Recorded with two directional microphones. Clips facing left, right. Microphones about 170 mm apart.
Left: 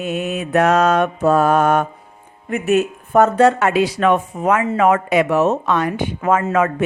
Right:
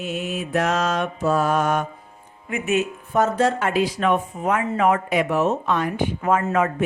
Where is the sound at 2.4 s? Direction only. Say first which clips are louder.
Left 6 dB; 40° left (ahead or behind).